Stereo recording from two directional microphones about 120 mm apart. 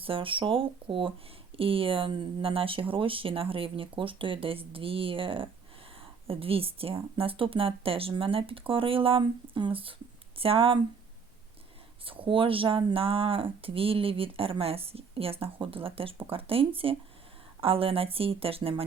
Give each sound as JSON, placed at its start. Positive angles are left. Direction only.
{"t": 0.0, "sound": "speech", "side_deg": -50}
{"t": 12.0, "sound": "speech", "side_deg": -45}